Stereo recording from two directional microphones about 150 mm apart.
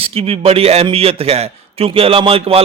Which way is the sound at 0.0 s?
40° right (ahead or behind).